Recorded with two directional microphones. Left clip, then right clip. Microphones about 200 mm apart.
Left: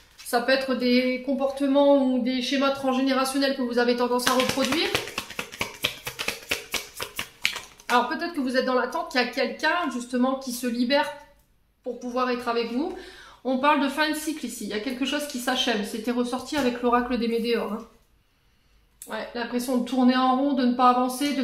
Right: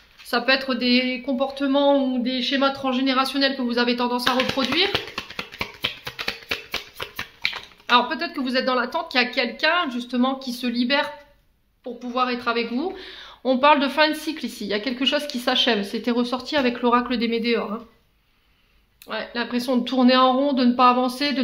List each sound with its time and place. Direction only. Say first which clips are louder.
0.3 s speech: right 2 dB; 30° right (ahead or behind)
13.4 s a woman's voice: right 5 dB; 45° right (ahead or behind)
19.0 s speech: right 4 dB; 30° right (ahead or behind)